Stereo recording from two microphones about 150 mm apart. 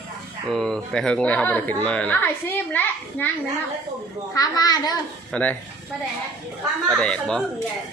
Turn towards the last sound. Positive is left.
turn(degrees=5)  # may be behind; listen again after turning